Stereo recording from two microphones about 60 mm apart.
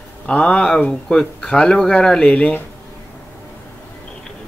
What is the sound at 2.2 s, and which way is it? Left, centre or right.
Speech, left.